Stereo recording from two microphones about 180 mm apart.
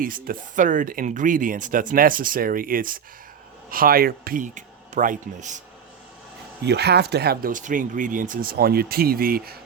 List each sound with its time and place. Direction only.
0.0 s speech: 50° right (ahead or behind)
6.7 s speech: 65° right (ahead or behind)